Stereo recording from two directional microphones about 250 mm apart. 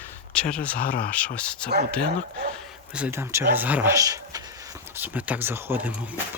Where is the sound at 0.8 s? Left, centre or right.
Left.